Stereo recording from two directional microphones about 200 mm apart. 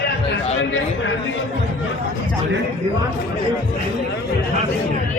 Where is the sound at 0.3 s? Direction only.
70° left (ahead or behind).